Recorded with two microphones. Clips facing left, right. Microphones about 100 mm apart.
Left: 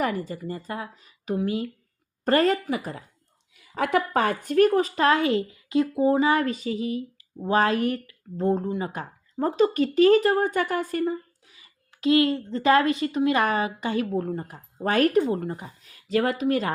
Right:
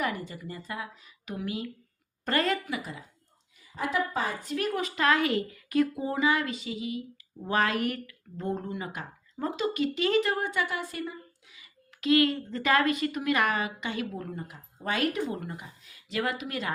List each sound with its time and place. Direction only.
0.0 s a woman's voice: 40° left (ahead or behind)
3.6 s a woman's voice: 65° left (ahead or behind); by 16.7 s 40° left (ahead or behind)